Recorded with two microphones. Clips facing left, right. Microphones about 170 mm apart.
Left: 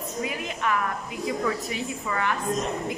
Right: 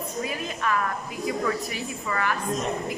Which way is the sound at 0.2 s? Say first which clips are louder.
Left 1 dB; 15° left (ahead or behind).